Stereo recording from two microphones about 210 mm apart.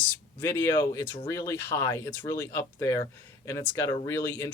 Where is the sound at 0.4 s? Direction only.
10° left (ahead or behind).